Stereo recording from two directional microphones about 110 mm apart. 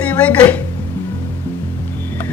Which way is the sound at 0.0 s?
15° left (ahead or behind).